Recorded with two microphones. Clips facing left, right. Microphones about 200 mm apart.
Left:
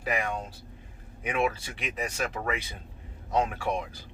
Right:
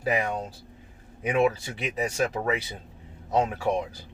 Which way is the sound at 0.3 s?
35° right (ahead or behind).